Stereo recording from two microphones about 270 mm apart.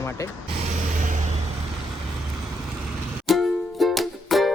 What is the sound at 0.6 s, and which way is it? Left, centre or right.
Vehicle, right.